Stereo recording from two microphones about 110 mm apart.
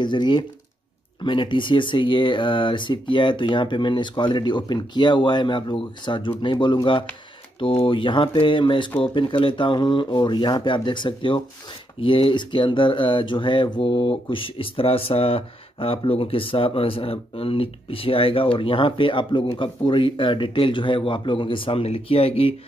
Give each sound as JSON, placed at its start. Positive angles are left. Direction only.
{"t": 0.0, "sound": "speech", "side_deg": 45}